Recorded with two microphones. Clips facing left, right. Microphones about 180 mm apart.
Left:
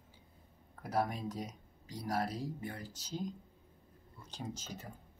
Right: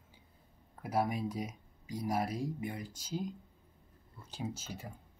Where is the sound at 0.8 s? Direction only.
10° right (ahead or behind).